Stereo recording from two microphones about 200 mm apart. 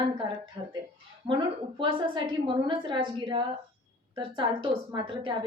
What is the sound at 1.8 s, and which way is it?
A woman's voice, 25° right (ahead or behind).